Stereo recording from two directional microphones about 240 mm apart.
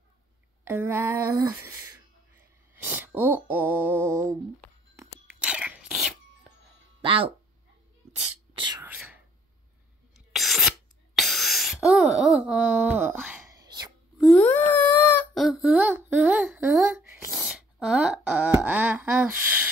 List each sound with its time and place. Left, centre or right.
0.7 s female singing: centre
1.5 s speech: centre
2.7 s a sound: centre
4.9 s crunch: centre
7.0 s speech: right
8.8 s whispering: centre
10.1 s a sound: centre
14.1 s wail: centre